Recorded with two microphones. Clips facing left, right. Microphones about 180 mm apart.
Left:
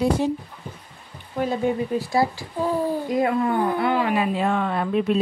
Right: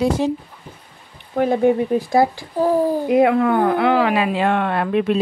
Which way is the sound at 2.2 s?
40° right (ahead or behind).